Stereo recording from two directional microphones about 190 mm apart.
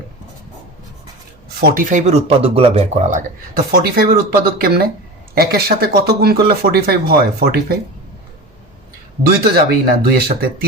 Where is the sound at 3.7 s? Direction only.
50° right (ahead or behind).